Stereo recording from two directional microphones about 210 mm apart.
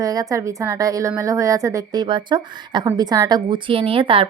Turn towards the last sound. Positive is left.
turn(degrees=-25)  # may be behind; listen again after turning